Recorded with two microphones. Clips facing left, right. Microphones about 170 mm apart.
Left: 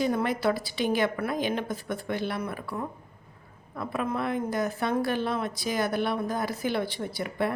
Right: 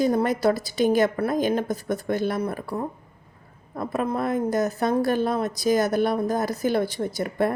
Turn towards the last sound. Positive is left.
turn(degrees=-45)  # may be behind; listen again after turning